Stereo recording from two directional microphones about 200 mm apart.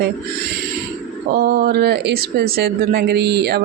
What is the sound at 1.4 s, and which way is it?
Speech, 50° right (ahead or behind).